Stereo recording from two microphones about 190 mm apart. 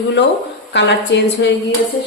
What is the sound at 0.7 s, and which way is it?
Speech, 70° left (ahead or behind).